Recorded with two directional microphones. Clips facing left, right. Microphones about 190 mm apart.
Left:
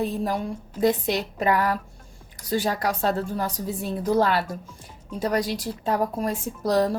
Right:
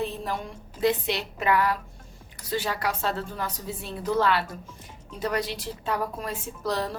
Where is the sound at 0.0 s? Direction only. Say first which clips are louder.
Left 5 dB; 40° left (ahead or behind).